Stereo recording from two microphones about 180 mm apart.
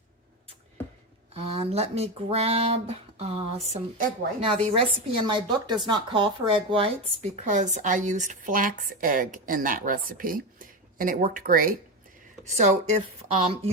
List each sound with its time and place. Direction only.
1.3 s speech: 35° right (ahead or behind)
4.7 s speech: 25° right (ahead or behind); by 11.7 s 50° right (ahead or behind)
12.5 s speech: 40° right (ahead or behind)